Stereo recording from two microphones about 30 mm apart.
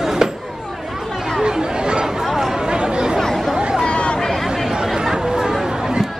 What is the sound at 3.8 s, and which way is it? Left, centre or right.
Chatter, left.